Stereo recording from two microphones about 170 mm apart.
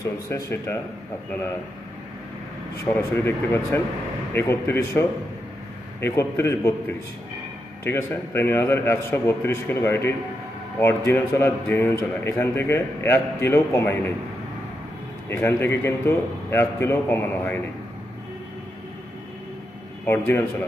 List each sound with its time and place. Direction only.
0.3 s a man's voice: 15° left (ahead or behind)
2.8 s a man's voice: 15° left (ahead or behind)
15.2 s a man's voice: 15° left (ahead or behind)
20.1 s a man's voice: 10° left (ahead or behind)